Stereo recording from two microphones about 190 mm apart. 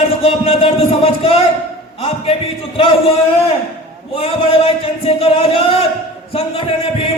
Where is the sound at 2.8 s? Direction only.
30° left (ahead or behind).